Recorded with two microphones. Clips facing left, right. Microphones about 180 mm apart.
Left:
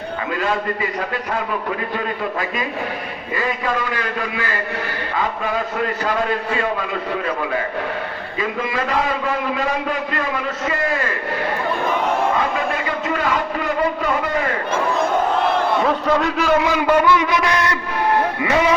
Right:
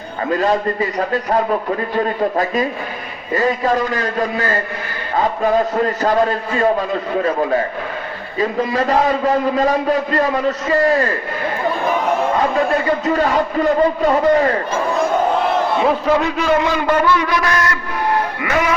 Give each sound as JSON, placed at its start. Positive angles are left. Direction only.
{"t": 0.3, "sound": "a man's voice", "side_deg": -40}
{"t": 12.7, "sound": "a man's voice", "side_deg": -40}
{"t": 15.8, "sound": "a man's voice", "side_deg": -5}
{"t": 17.2, "sound": "a man's voice", "side_deg": 20}